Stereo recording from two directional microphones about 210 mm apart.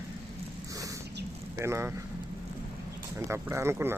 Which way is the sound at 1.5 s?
15° right (ahead or behind).